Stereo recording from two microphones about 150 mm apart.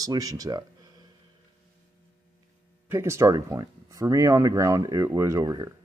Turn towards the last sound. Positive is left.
turn(degrees=-25)  # may be behind; listen again after turning